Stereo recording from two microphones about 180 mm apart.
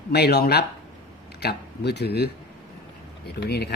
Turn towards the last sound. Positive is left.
turn(degrees=65)  # may be behind; listen again after turning